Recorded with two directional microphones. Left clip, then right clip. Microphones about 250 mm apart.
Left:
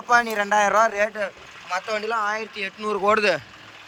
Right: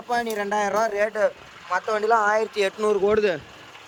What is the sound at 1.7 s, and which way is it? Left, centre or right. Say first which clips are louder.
Speech: right 4 dB; right.